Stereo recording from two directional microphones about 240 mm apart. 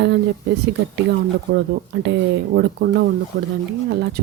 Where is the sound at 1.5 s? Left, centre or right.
Right.